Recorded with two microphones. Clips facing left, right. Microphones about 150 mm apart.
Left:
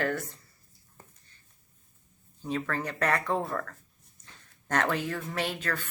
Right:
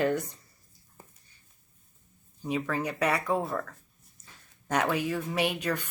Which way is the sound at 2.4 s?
10° right (ahead or behind).